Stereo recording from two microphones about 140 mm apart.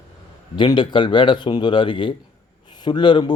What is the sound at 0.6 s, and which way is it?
A man's voice, 35° left (ahead or behind).